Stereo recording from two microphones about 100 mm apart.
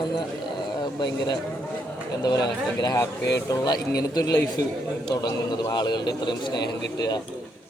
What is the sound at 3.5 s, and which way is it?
A man's voice, 40° left (ahead or behind).